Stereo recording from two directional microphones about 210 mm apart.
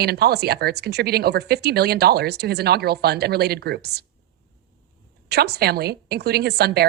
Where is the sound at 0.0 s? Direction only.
50° right (ahead or behind).